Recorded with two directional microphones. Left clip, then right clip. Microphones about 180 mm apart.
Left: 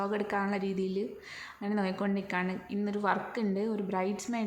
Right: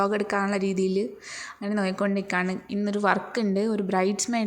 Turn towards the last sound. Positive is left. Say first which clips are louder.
# right 8 dB
turn(degrees=-30)  # may be behind; listen again after turning